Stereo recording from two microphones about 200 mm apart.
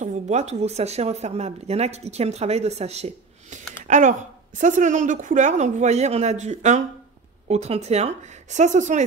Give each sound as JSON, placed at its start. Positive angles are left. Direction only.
{"t": 0.0, "sound": "speech", "side_deg": -35}